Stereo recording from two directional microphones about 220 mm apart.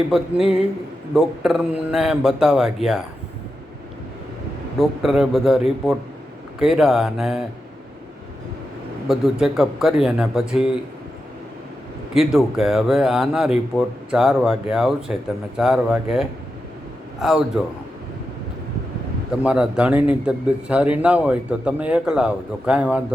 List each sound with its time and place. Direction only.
0.1 s a man's voice: centre (ahead or behind)
4.8 s a man's voice: centre (ahead or behind)
9.0 s a man's voice: centre (ahead or behind)
12.1 s a man's voice: centre (ahead or behind)
19.3 s a man's voice: 5° right (ahead or behind)